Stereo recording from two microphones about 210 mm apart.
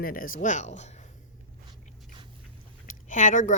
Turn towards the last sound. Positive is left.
turn(degrees=35)  # may be behind; listen again after turning